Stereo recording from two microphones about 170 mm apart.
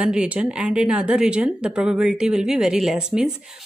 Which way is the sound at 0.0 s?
5° right (ahead or behind).